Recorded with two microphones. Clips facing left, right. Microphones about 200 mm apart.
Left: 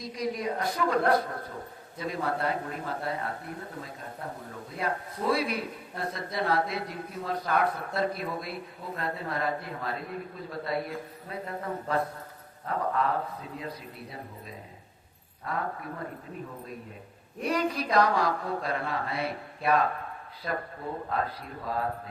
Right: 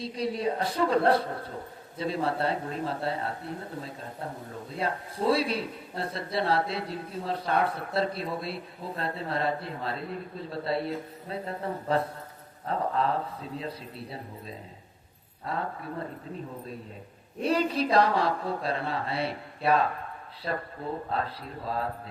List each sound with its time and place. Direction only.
0.0 s a man's voice: 30° right (ahead or behind)
17.4 s a man's voice: 30° right (ahead or behind)